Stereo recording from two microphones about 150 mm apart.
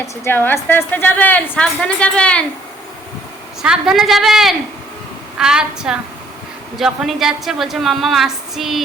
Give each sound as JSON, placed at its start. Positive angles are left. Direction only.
{"t": 0.0, "sound": "a woman's voice", "side_deg": 15}
{"t": 3.6, "sound": "a woman's voice", "side_deg": -5}